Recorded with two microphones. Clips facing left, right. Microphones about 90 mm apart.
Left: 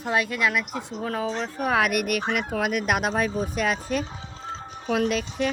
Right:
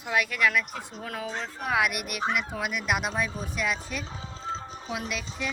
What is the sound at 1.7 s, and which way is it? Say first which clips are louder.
Speech: left 4 dB; 45° left (ahead or behind).